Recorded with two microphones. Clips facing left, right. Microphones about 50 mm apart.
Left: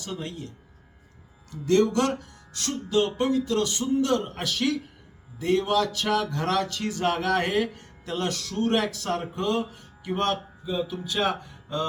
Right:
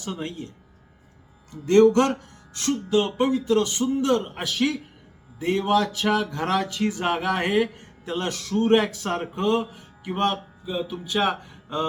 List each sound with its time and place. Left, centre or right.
0.0 s speech: right